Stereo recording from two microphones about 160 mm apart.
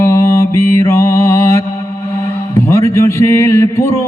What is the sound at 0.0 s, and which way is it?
Mantra, 15° left (ahead or behind).